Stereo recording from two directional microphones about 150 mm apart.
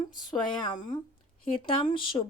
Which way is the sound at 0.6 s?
30° left (ahead or behind).